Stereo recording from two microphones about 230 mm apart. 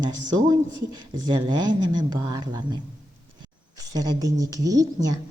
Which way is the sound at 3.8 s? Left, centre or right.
Centre.